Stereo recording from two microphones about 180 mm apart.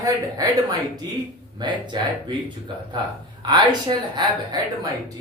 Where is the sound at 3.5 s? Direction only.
25° right (ahead or behind).